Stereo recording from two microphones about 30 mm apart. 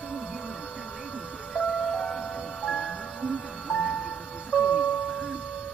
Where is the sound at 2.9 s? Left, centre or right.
Left.